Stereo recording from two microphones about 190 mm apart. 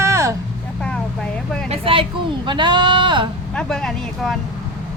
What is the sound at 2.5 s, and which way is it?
Speech, 25° right (ahead or behind).